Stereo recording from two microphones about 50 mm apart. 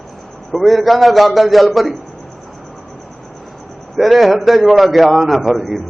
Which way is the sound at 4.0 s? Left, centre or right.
Centre.